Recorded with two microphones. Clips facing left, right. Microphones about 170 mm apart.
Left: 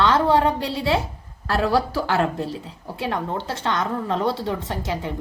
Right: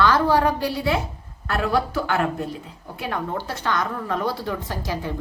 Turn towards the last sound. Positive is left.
turn(degrees=20)  # may be behind; listen again after turning